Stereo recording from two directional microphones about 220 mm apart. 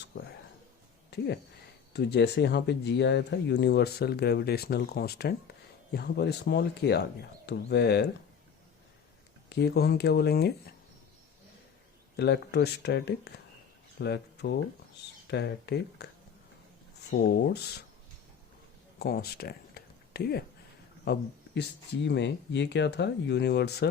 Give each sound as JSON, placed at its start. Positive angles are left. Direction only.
{"t": 1.1, "sound": "a sound", "side_deg": 50}
{"t": 1.9, "sound": "speech", "side_deg": 50}
{"t": 9.5, "sound": "speech", "side_deg": 45}
{"t": 12.1, "sound": "speech", "side_deg": 50}
{"t": 17.1, "sound": "speech", "side_deg": 45}
{"t": 18.9, "sound": "a sound", "side_deg": 45}
{"t": 21.0, "sound": "speech", "side_deg": 50}